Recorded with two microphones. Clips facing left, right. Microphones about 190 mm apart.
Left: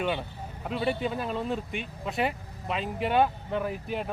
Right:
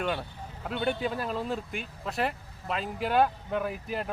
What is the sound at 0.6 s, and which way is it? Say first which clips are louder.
Speech: left 1 dB; centre (ahead or behind).